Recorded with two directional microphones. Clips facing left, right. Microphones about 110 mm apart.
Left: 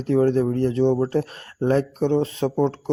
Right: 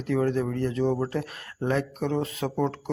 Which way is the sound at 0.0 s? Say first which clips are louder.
Left 6 dB; 35° left (ahead or behind).